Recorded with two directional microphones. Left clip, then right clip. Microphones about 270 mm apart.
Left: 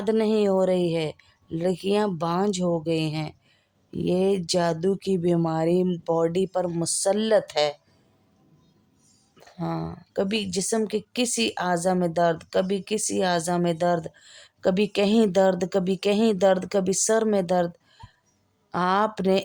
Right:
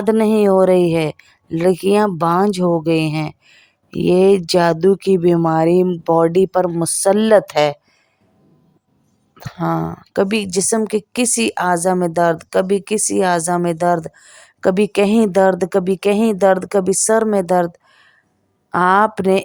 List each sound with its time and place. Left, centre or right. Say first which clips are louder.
0.0 s a woman's voice: right 8 dB; right
9.3 s a woman's voice: right 11 dB; centre